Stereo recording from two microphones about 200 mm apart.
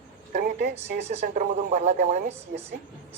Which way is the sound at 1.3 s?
35° right (ahead or behind).